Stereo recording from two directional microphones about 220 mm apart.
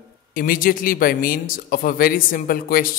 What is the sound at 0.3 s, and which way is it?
Speech, 40° left (ahead or behind).